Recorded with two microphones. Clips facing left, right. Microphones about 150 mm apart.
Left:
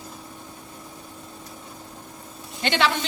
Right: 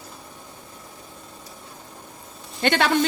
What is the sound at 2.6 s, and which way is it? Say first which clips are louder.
Speech: right 3 dB; 50° right (ahead or behind).